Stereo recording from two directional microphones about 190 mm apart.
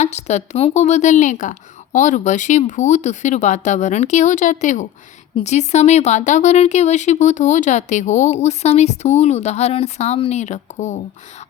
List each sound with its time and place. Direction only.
0.0 s speech: 35° left (ahead or behind)